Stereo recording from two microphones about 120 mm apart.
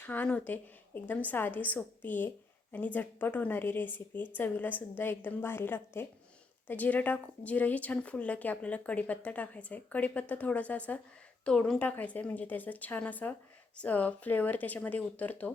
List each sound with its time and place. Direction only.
0.0 s a woman's voice: 15° left (ahead or behind)